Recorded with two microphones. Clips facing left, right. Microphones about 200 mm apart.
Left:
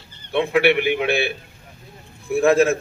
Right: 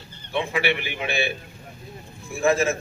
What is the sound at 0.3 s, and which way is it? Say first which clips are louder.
A man's voice: left 7 dB; 60° left (ahead or behind).